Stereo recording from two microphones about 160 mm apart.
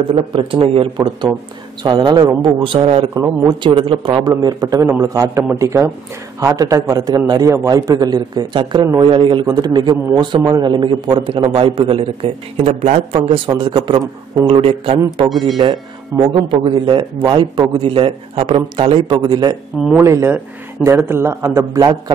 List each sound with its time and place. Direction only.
0.3 s a man's voice: 35° right (ahead or behind)
4.4 s a man's voice: 25° right (ahead or behind)
14.5 s a man's voice: 35° right (ahead or behind)
15.2 s speech: centre (ahead or behind)
15.5 s a man's voice: 30° right (ahead or behind)
16.4 s a man's voice: 30° right (ahead or behind)
20.0 s a man's voice: 15° right (ahead or behind)